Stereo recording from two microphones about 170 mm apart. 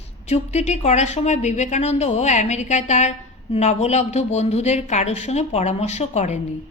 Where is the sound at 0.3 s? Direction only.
40° left (ahead or behind).